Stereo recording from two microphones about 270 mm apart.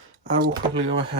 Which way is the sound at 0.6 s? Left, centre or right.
Centre.